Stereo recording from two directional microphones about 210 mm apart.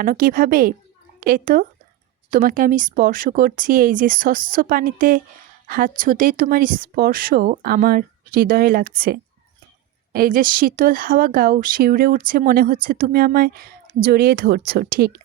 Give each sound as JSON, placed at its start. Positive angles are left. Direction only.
{"t": 0.0, "sound": "speech", "side_deg": -45}